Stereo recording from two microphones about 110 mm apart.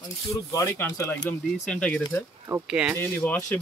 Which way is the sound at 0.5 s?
25° left (ahead or behind).